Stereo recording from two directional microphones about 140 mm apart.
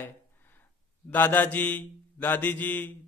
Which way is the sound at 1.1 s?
15° left (ahead or behind).